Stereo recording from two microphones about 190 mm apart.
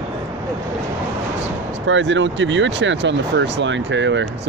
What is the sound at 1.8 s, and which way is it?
Speech, 80° right.